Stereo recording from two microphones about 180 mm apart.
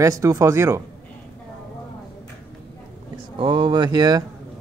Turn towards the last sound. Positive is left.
turn(degrees=-20)  # may be behind; listen again after turning